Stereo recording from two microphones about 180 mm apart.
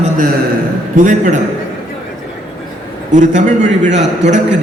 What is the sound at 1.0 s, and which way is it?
Speech, 45° right (ahead or behind).